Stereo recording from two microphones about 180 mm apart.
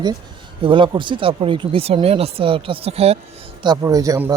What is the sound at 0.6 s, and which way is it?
Speech, 30° right (ahead or behind).